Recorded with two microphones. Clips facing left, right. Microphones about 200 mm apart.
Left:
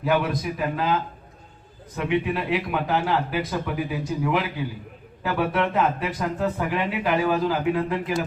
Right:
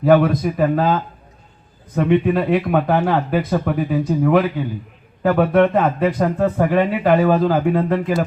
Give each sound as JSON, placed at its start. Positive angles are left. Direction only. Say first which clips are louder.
{"t": 0.0, "sound": "speech", "louder": "right 9 dB", "side_deg": -50}